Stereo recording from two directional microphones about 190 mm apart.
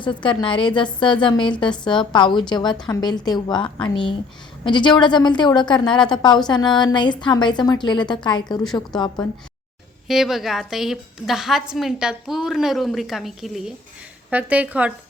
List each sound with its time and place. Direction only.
0.0 s a woman's voice: 25° left (ahead or behind)
10.1 s a woman's voice: centre (ahead or behind)